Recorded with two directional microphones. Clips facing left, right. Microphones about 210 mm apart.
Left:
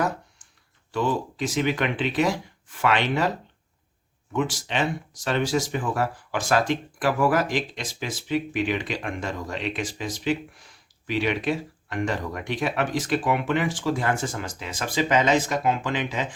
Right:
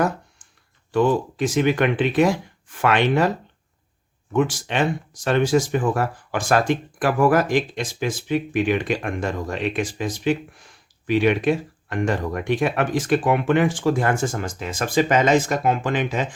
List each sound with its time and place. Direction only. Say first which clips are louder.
0.9 s speech: right 6 dB; 55° right (ahead or behind)
4.3 s speech: right 5 dB; 50° right (ahead or behind)